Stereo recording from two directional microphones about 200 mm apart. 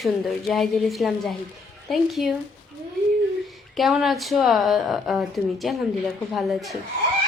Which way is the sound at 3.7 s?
Centre (ahead or behind).